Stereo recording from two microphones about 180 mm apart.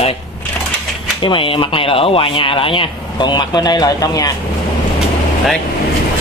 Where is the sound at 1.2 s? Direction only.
30° left (ahead or behind).